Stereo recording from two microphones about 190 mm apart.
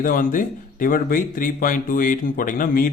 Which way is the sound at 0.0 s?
45° left (ahead or behind).